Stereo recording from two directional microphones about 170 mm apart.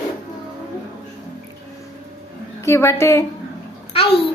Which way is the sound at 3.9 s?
35° left (ahead or behind).